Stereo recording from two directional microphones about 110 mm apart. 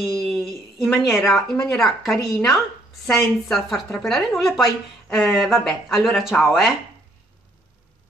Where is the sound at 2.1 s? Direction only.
30° left (ahead or behind).